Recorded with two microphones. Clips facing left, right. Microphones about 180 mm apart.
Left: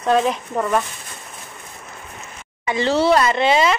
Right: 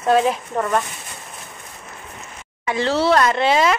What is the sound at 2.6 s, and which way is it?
Speech, centre (ahead or behind).